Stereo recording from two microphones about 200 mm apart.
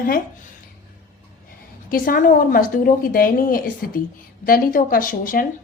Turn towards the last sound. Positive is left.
turn(degrees=45)  # may be behind; listen again after turning